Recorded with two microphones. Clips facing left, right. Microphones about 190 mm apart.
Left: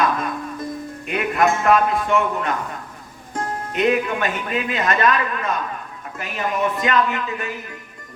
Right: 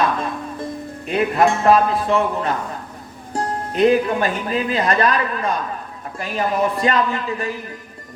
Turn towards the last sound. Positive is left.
turn(degrees=-35)  # may be behind; listen again after turning